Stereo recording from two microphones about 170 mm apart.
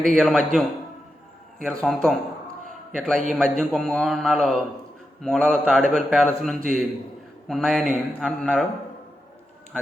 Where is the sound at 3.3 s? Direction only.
Centre (ahead or behind).